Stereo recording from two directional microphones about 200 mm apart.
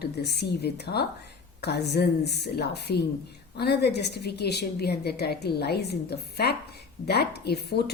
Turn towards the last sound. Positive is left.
turn(degrees=55)  # may be behind; listen again after turning